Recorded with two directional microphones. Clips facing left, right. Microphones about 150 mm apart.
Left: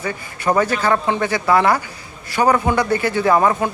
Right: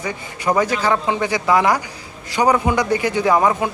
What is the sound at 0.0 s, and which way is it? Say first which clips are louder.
Speech: left 1 dB; 15° right (ahead or behind).